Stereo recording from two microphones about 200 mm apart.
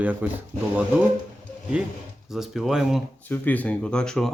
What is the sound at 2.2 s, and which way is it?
Speech, centre (ahead or behind).